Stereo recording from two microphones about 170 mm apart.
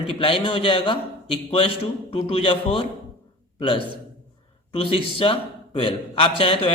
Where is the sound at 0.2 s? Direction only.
30° left (ahead or behind).